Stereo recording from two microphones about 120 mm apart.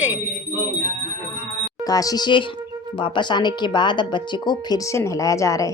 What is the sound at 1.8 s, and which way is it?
Speech, 30° left (ahead or behind).